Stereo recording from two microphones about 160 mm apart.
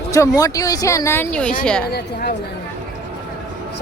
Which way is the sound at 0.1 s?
20° left (ahead or behind).